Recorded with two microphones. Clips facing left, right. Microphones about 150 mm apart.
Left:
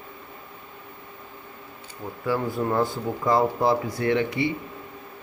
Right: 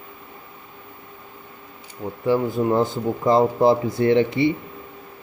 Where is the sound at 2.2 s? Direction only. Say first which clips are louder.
Right 5 dB; 20° right (ahead or behind).